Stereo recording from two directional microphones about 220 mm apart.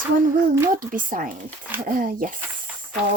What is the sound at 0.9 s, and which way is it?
Speech, 40° right (ahead or behind).